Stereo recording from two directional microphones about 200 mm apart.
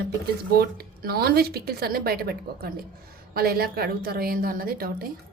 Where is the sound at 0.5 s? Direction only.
50° right (ahead or behind).